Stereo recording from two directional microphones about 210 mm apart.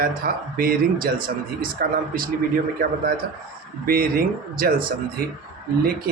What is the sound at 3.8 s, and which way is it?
Speech, 45° right (ahead or behind).